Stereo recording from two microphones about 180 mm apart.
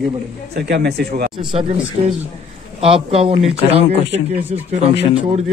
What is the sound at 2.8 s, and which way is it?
Speech, 30° right (ahead or behind).